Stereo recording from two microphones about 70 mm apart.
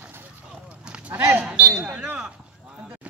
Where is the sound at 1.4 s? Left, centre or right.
Centre.